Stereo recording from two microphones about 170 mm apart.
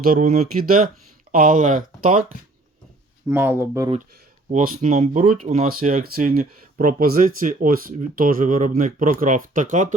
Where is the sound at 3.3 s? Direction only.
10° right (ahead or behind).